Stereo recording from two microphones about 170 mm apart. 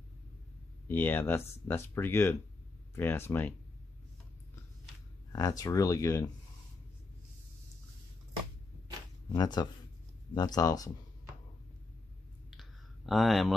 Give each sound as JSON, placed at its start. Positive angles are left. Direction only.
{"t": 0.8, "sound": "speech", "side_deg": 10}
{"t": 5.3, "sound": "speech", "side_deg": 20}
{"t": 9.3, "sound": "speech", "side_deg": 25}
{"t": 12.4, "sound": "a sound", "side_deg": 0}